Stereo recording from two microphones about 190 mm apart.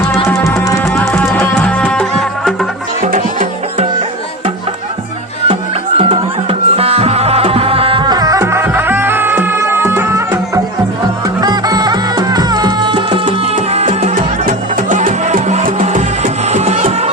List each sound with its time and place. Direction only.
0.3 s music: 10° left (ahead or behind)
1.1 s music: 5° left (ahead or behind)
6.0 s music: 30° right (ahead or behind)
13.7 s music: 40° right (ahead or behind)